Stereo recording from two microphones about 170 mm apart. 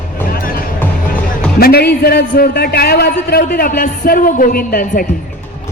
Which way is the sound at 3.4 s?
55° left (ahead or behind).